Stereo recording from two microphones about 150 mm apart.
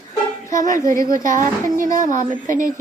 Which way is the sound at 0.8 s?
20° left (ahead or behind).